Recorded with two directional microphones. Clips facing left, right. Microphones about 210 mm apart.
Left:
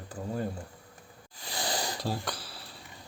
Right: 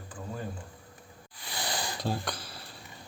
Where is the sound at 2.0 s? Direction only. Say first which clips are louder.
Right 1 dB; 5° left (ahead or behind).